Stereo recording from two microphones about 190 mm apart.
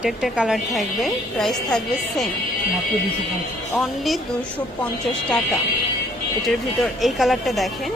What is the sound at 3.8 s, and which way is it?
Speech, centre (ahead or behind).